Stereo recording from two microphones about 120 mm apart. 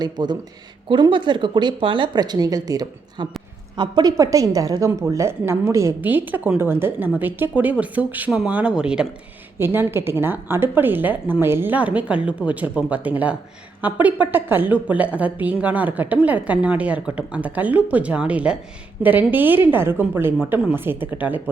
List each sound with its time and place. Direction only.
0.0 s a woman's voice: 35° right (ahead or behind); by 9.0 s 5° right (ahead or behind)
9.6 s a woman's voice: 20° right (ahead or behind)